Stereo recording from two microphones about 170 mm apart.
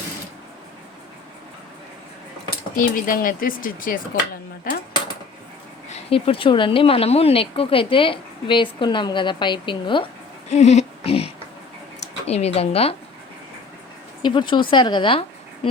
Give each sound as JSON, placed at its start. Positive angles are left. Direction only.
{"t": 2.7, "sound": "speech", "side_deg": 55}
{"t": 5.9, "sound": "speech", "side_deg": 35}
{"t": 10.5, "sound": "a sound", "side_deg": 40}
{"t": 12.2, "sound": "speech", "side_deg": 40}
{"t": 14.2, "sound": "speech", "side_deg": 25}